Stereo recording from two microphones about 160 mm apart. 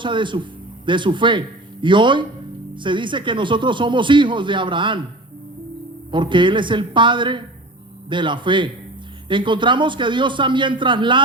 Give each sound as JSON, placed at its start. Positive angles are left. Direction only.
{"t": 0.0, "sound": "speech", "side_deg": -30}
{"t": 6.1, "sound": "speech", "side_deg": -30}